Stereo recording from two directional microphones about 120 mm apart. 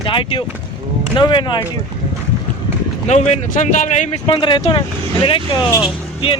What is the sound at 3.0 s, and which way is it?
Speech, 70° left (ahead or behind).